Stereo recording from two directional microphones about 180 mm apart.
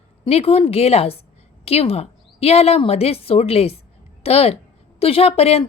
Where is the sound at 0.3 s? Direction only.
35° left (ahead or behind).